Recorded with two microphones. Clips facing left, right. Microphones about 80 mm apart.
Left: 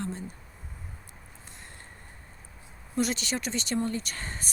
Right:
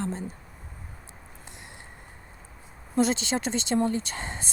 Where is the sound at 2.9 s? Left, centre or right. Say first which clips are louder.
Right 5 dB; right.